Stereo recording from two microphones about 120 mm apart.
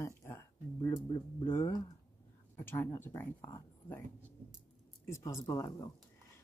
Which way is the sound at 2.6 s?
20° left (ahead or behind).